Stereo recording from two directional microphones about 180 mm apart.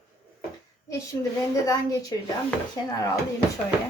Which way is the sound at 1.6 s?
20° left (ahead or behind).